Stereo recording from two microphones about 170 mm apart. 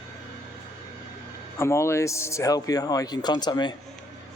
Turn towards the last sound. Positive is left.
turn(degrees=25)  # may be behind; listen again after turning